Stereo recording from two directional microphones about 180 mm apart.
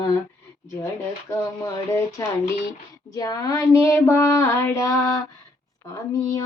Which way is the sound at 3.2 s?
20° left (ahead or behind).